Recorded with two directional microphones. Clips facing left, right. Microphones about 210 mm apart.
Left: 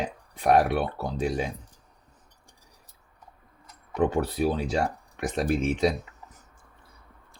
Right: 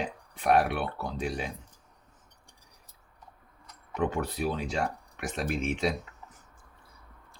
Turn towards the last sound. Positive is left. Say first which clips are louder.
# left 6 dB
turn(degrees=40)  # may be behind; listen again after turning